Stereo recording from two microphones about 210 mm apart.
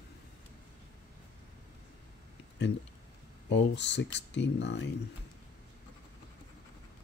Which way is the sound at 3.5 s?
55° left (ahead or behind).